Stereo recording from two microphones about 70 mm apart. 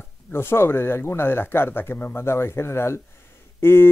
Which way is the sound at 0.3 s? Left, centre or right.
Left.